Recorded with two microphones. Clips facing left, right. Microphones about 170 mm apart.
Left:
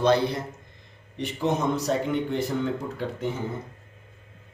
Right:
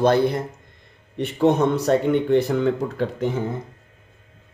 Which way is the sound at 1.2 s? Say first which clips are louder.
Right 8 dB; 65° right (ahead or behind).